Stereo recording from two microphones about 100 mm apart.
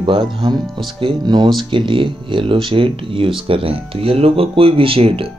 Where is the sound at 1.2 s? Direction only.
45° right (ahead or behind).